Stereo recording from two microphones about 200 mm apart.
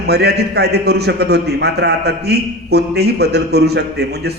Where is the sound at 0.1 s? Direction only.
55° right (ahead or behind).